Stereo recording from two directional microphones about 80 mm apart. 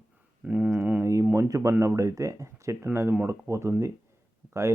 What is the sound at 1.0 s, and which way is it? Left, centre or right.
Speech, right.